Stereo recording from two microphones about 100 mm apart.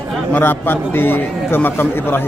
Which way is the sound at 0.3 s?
20° left (ahead or behind).